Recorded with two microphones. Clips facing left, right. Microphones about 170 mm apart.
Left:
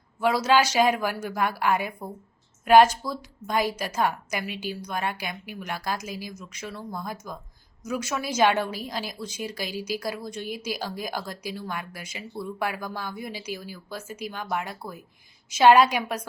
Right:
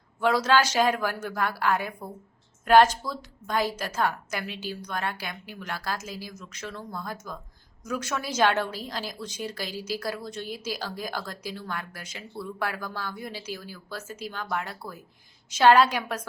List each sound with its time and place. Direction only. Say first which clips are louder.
0.2 s a woman's voice: left 1 dB; 10° left (ahead or behind)